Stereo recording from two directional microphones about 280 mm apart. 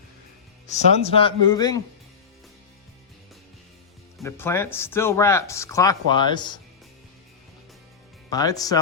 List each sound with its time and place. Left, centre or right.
0.7 s speech: left
4.2 s speech: centre
8.3 s speech: centre